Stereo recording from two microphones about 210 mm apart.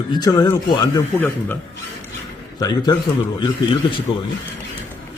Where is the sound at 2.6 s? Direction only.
20° left (ahead or behind).